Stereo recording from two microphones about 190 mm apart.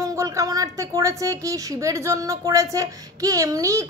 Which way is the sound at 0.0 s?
15° right (ahead or behind).